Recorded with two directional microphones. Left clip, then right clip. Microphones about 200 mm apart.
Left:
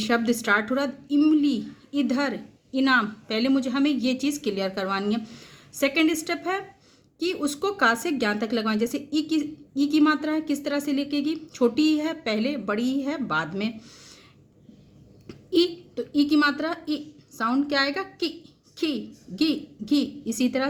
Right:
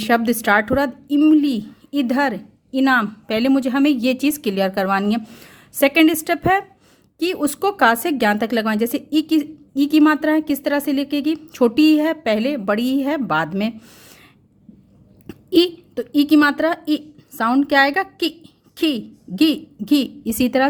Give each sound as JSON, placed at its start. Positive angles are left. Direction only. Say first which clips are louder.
{"t": 0.0, "sound": "a woman's voice", "louder": "right 6 dB", "side_deg": -40}
{"t": 15.3, "sound": "a woman's voice", "louder": "right 6 dB", "side_deg": -40}